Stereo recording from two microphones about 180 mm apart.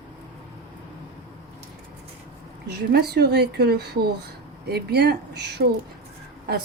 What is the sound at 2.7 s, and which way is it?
A woman's voice, 65° right (ahead or behind).